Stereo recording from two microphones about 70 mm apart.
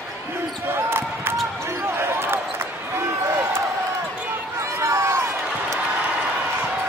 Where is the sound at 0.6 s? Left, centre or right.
Right.